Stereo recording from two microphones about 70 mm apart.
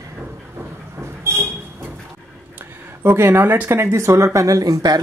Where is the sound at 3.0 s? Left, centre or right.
Right.